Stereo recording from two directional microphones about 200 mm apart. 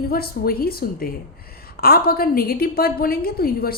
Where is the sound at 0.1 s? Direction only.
50° left (ahead or behind).